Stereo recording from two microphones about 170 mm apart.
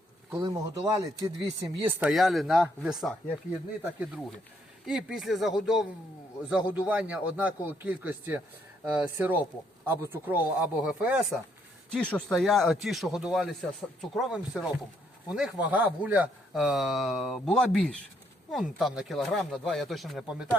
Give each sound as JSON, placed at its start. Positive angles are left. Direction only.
{"t": 0.4, "sound": "speech", "side_deg": -25}
{"t": 4.9, "sound": "speech", "side_deg": -5}